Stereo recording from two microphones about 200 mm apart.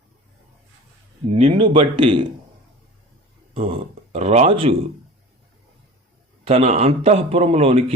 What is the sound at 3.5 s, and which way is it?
Speech, 25° right (ahead or behind).